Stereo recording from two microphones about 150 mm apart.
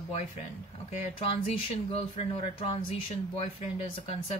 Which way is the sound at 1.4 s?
40° left (ahead or behind).